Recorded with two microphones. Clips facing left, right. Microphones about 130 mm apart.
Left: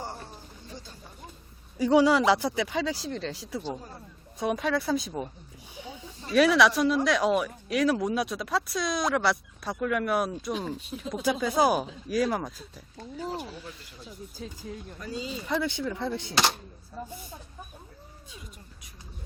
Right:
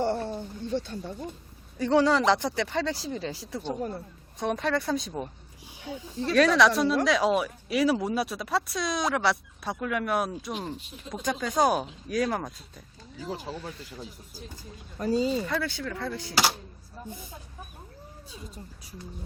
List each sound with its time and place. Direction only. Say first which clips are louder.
0.0 s a sound: right 12 dB; 70° right (ahead or behind)
1.8 s speech: left 1 dB; 10° left (ahead or behind)
6.3 s speech: even; 5° left (ahead or behind)
14.9 s speech: right 12 dB; 40° right (ahead or behind)
15.4 s speech: left 2 dB; 20° left (ahead or behind)
16.3 s speech: right 1 dB; 5° right (ahead or behind)